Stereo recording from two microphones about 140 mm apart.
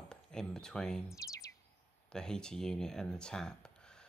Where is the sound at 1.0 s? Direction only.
25° left (ahead or behind).